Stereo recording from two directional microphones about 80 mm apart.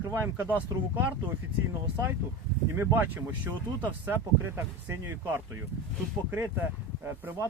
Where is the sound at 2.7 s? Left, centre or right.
Right.